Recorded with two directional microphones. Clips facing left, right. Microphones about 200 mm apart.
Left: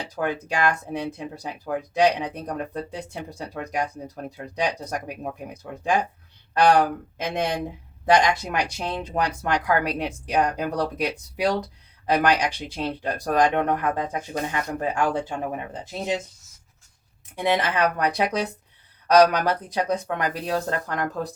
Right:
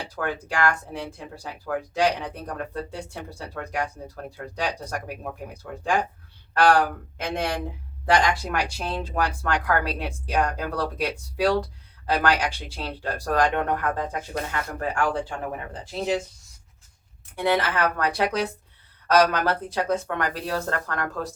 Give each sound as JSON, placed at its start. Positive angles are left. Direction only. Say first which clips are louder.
{"t": 0.2, "sound": "speech", "louder": "left 1 dB", "side_deg": 20}
{"t": 6.5, "sound": "speech", "louder": "left 1 dB", "side_deg": 20}
{"t": 8.1, "sound": "speech", "louder": "left 2 dB", "side_deg": 20}
{"t": 17.3, "sound": "speech", "louder": "even", "side_deg": 20}